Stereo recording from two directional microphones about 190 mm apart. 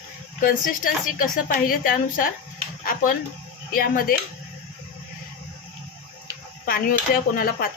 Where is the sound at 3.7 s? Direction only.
50° left (ahead or behind).